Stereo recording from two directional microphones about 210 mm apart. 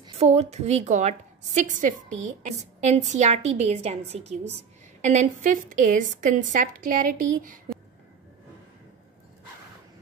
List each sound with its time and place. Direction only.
0.0 s a woman's voice: 30° right (ahead or behind)